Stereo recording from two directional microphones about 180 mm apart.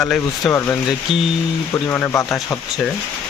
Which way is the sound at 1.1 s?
Centre (ahead or behind).